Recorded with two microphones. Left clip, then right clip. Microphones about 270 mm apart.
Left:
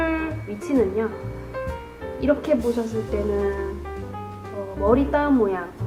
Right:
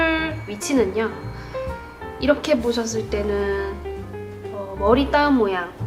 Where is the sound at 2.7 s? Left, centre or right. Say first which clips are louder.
Right 2 dB; left.